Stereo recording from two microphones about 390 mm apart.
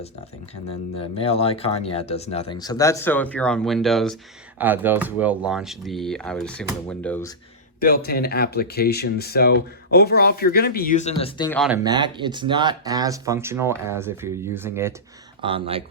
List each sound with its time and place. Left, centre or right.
0.9 s speech: centre
7.8 s speech: left; by 15.8 s centre